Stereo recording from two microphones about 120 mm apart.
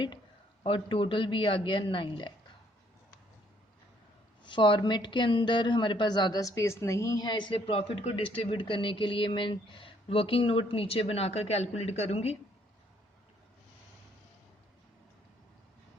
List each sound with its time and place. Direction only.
0.6 s speech: 45° left (ahead or behind)
4.4 s speech: 40° left (ahead or behind); by 12.4 s 60° left (ahead or behind)